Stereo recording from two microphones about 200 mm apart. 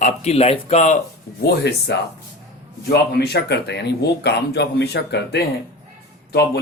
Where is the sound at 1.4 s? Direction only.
55° left (ahead or behind).